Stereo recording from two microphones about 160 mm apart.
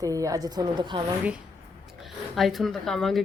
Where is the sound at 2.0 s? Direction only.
Centre (ahead or behind).